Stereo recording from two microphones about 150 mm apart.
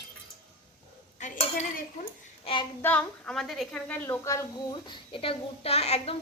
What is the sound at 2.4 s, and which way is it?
Child singing, 35° left (ahead or behind).